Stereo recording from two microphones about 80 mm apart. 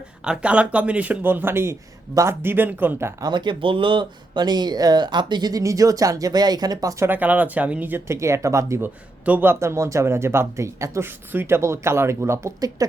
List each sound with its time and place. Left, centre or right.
0.3 s speech: centre
3.2 s speech: right
7.0 s speech: right
8.8 s speech: right
11.3 s speech: right